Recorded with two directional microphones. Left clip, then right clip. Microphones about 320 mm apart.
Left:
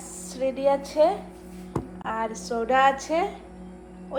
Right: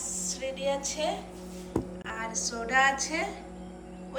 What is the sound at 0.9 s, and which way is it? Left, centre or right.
A woman's voice, centre.